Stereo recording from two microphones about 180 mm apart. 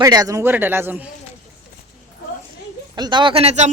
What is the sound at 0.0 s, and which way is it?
A man's voice, 20° right (ahead or behind).